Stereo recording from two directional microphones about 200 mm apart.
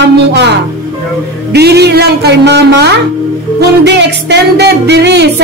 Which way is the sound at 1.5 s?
55° right (ahead or behind).